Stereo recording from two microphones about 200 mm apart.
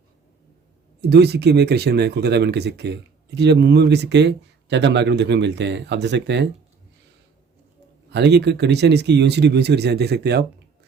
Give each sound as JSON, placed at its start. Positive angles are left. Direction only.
{"t": 1.1, "sound": "speech", "side_deg": -55}
{"t": 8.1, "sound": "speech", "side_deg": -55}